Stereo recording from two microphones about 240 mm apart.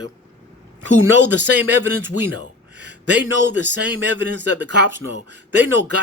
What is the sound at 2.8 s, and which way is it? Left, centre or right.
Speech, right.